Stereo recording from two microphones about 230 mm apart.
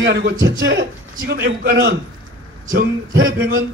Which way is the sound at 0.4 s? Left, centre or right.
Right.